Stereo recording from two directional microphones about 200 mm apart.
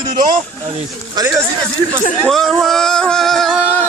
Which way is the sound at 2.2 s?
Centre (ahead or behind).